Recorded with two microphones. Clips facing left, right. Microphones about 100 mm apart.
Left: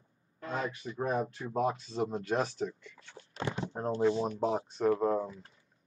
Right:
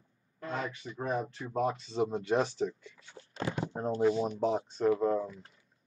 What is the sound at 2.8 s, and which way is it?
Speech, 10° right (ahead or behind).